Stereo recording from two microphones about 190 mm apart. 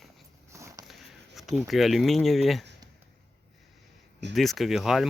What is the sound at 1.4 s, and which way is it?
Speech, centre (ahead or behind).